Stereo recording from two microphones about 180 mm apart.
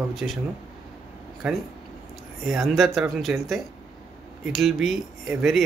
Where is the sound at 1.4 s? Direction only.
5° right (ahead or behind).